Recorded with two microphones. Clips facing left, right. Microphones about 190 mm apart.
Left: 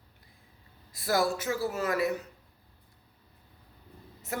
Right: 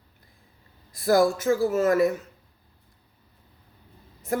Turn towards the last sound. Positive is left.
turn(degrees=-45)  # may be behind; listen again after turning